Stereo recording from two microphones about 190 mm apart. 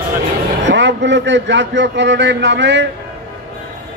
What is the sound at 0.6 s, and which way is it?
A man's voice, 70° right (ahead or behind).